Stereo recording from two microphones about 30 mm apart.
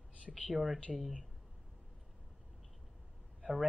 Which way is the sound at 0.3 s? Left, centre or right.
Centre.